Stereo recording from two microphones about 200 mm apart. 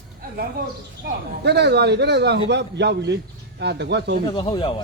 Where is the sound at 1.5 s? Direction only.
55° right (ahead or behind).